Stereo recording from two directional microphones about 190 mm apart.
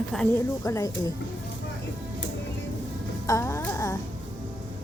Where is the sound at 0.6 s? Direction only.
15° left (ahead or behind).